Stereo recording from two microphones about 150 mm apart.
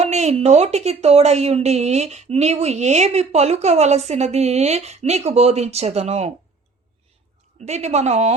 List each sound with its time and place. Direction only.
0.0 s speech: 50° right (ahead or behind)
7.6 s speech: 50° right (ahead or behind)